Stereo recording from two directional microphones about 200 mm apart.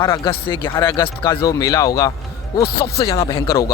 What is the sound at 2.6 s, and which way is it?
Speech, 50° left (ahead or behind).